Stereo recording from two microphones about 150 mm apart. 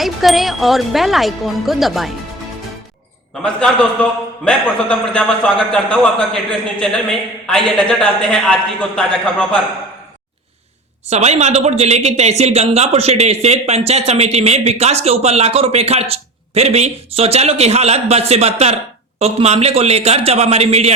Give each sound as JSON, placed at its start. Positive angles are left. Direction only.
{"t": 0.0, "sound": "speech", "side_deg": 0}
{"t": 3.4, "sound": "a man's voice", "side_deg": 5}
{"t": 11.1, "sound": "speech", "side_deg": -45}